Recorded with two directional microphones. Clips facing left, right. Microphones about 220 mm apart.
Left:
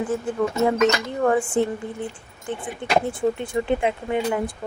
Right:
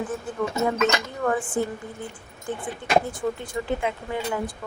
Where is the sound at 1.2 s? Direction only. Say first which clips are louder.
Left 5 dB; 30° left (ahead or behind).